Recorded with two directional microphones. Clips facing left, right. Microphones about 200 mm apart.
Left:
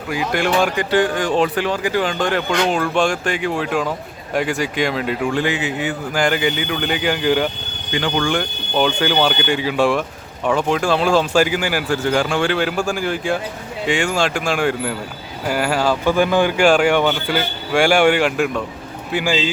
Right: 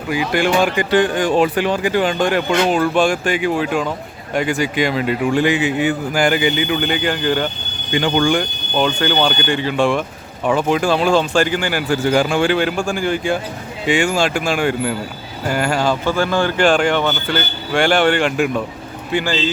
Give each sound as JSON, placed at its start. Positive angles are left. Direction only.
{"t": 0.1, "sound": "speech", "side_deg": 0}
{"t": 5.3, "sound": "speech", "side_deg": -15}
{"t": 7.9, "sound": "speech", "side_deg": -20}
{"t": 8.3, "sound": "speech", "side_deg": 0}
{"t": 12.1, "sound": "speech", "side_deg": -10}
{"t": 16.1, "sound": "speech", "side_deg": 15}
{"t": 19.1, "sound": "speech", "side_deg": 10}